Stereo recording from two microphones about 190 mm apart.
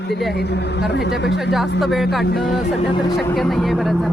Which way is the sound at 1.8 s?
Centre (ahead or behind).